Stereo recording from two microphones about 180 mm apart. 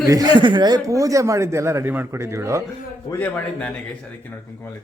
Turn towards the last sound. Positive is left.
turn(degrees=10)  # may be behind; listen again after turning